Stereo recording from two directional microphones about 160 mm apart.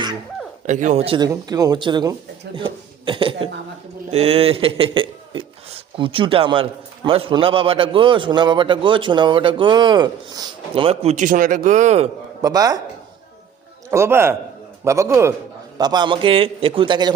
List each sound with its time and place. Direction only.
0.7 s a man's voice: 50° right (ahead or behind)
1.3 s a man's voice: 25° right (ahead or behind); by 12.0 s 45° right (ahead or behind)
12.4 s speech: 25° right (ahead or behind)
13.9 s a man's voice: 15° right (ahead or behind)